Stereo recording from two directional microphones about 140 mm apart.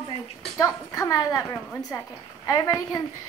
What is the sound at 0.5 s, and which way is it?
A woman's voice, 25° left (ahead or behind).